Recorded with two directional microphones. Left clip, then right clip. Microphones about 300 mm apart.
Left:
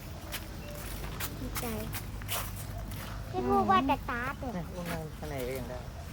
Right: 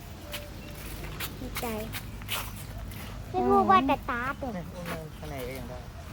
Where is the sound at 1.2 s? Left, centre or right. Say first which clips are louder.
Right 4 dB; centre.